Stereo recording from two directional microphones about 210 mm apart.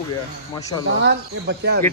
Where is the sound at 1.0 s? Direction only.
55° right (ahead or behind).